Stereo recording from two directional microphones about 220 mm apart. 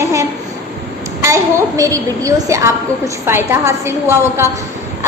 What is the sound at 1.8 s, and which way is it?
A woman's voice, 15° right (ahead or behind).